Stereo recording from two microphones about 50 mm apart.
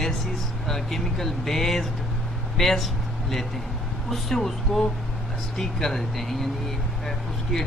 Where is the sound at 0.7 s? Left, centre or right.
Centre.